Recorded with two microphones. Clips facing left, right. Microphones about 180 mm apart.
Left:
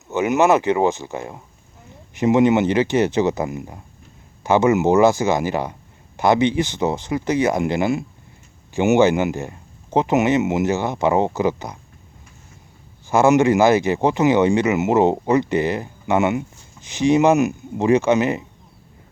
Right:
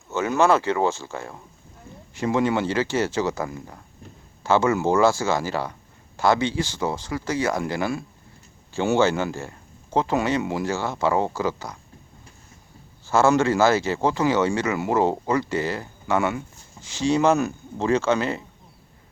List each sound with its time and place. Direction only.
0.1 s speech: 15° left (ahead or behind)
13.1 s speech: 15° left (ahead or behind)